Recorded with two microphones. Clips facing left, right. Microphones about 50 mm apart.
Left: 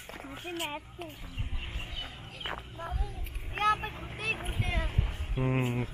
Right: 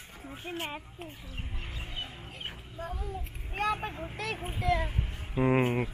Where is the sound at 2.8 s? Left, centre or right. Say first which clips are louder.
Right 6 dB; left.